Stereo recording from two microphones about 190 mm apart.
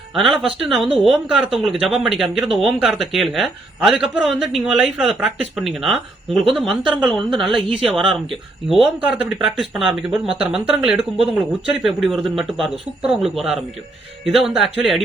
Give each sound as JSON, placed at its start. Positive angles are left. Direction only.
{"t": 0.3, "sound": "speech", "side_deg": 0}
{"t": 2.5, "sound": "speech", "side_deg": -30}
{"t": 2.7, "sound": "speech", "side_deg": 0}